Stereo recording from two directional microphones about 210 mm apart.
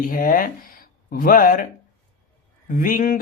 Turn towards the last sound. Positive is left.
turn(degrees=40)  # may be behind; listen again after turning